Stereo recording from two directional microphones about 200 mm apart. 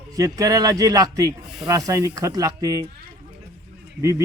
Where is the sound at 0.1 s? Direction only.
15° right (ahead or behind).